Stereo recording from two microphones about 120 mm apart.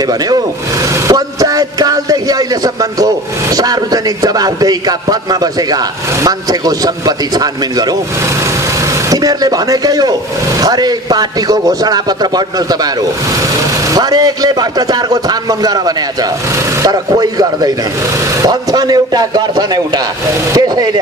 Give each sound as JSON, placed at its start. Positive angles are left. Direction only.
{"t": 0.0, "sound": "a man's voice", "side_deg": -30}